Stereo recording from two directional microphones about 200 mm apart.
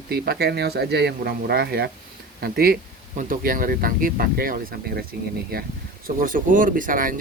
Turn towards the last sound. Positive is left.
turn(degrees=-45)  # may be behind; listen again after turning